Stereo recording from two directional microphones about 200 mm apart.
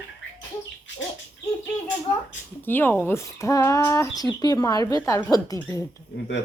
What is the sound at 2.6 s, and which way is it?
Speech, 10° left (ahead or behind).